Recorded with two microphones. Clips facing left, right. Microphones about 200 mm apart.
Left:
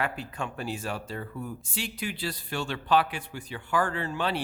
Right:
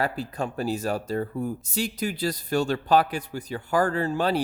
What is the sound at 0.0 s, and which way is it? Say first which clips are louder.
Speech: right 5 dB; 35° right (ahead or behind).